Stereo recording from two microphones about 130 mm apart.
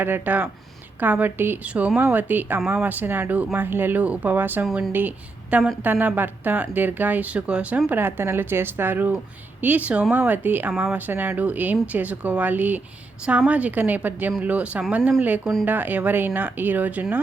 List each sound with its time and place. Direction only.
0.0 s speech: 15° right (ahead or behind)
4.6 s a woman's voice: 5° right (ahead or behind)